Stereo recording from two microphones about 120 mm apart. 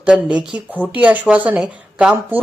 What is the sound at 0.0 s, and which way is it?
Speech, 10° right (ahead or behind).